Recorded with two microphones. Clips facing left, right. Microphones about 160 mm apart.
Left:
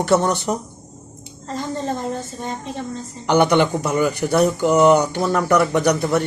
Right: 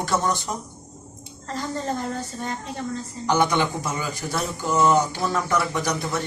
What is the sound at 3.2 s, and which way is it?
Speech, 65° left (ahead or behind).